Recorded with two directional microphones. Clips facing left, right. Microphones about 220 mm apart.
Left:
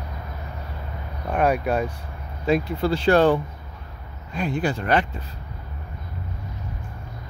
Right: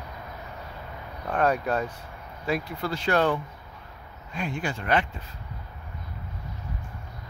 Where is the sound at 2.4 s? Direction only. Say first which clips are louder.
Left 7 dB; 25° left (ahead or behind).